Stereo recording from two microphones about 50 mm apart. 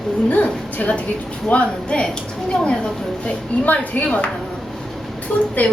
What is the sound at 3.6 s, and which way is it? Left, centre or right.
Speech, left.